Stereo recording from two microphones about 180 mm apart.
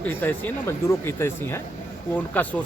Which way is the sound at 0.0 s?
10° left (ahead or behind).